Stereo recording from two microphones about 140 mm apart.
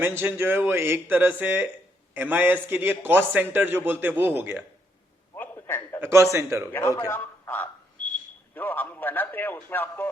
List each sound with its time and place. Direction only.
0.0 s a man's voice: 15° right (ahead or behind)
5.3 s a sound: 15° left (ahead or behind)
6.0 s a man's voice: 20° right (ahead or behind)
6.7 s a man's voice: 20° left (ahead or behind)